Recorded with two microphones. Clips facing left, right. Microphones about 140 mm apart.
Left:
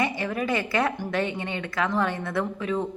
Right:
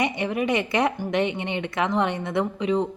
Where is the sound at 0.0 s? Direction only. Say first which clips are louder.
Right 2 dB; 20° right (ahead or behind).